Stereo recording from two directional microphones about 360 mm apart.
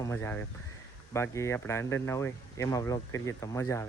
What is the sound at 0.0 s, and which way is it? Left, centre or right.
Speech, centre.